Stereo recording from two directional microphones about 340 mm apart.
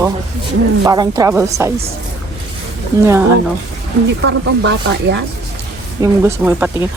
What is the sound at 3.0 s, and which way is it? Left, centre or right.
Speech, centre.